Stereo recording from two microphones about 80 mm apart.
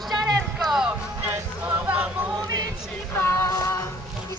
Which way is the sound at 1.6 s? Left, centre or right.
Right.